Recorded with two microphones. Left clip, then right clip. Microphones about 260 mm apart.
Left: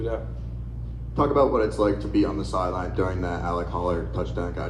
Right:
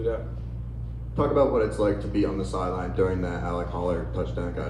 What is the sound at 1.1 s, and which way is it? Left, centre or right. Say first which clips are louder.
Speech: left 1 dB; left.